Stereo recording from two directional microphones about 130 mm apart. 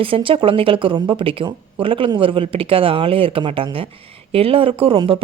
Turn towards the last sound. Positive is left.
turn(degrees=-40)  # may be behind; listen again after turning